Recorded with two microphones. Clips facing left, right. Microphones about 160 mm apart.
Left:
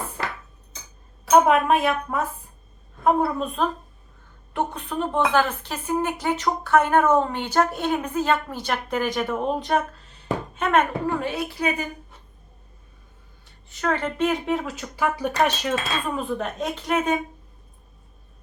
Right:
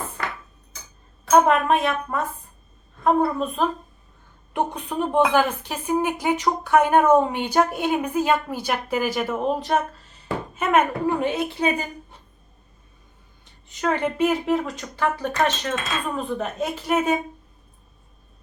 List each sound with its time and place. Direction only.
1.2 s speech: 5° left (ahead or behind)
4.5 s a woman's voice: 15° right (ahead or behind)
11.2 s a woman's voice: 20° right (ahead or behind)
13.4 s speech: 15° right (ahead or behind); by 15.7 s 10° left (ahead or behind)
16.1 s speech: centre (ahead or behind)